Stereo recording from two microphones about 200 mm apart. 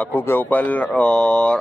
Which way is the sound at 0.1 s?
10° left (ahead or behind).